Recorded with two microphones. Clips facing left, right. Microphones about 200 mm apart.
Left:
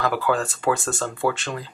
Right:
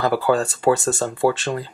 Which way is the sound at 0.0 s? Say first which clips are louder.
Right 4 dB; 30° right (ahead or behind).